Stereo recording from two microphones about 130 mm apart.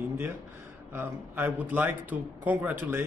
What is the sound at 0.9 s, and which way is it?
Speech, 15° right (ahead or behind).